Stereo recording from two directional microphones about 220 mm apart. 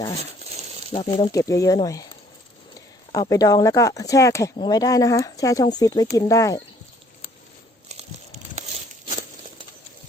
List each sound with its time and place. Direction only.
0.9 s speech: 30° left (ahead or behind)
1.3 s speech: 15° left (ahead or behind)
3.1 s speech: 15° left (ahead or behind)
8.5 s a sound: 30° right (ahead or behind)